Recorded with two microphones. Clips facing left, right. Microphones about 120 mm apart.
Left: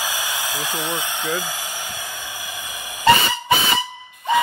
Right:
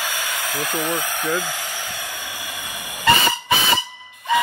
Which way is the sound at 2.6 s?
40° left (ahead or behind).